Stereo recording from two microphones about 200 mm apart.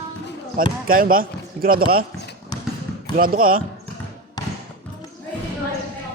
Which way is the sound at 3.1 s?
45° right (ahead or behind).